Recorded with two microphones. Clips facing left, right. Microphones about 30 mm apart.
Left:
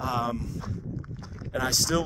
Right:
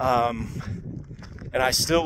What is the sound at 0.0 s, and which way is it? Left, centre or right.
Speech, right.